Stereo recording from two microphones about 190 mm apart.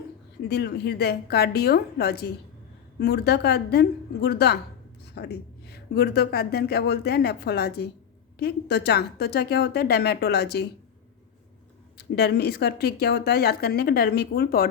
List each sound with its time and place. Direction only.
0.4 s speech: 60° left (ahead or behind)
11.9 s speech: 60° left (ahead or behind)